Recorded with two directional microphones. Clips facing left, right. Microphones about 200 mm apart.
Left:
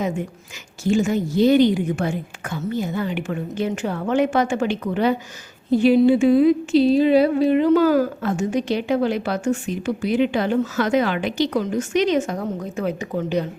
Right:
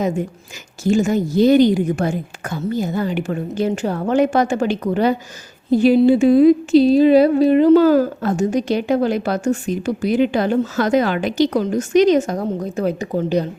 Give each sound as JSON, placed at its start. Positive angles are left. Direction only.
{"t": 0.9, "sound": "speech", "side_deg": -40}